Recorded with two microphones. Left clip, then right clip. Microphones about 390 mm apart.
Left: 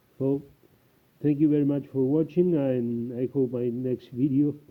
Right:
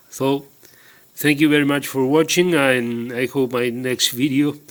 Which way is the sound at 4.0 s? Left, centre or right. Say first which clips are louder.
Right 10 dB; centre.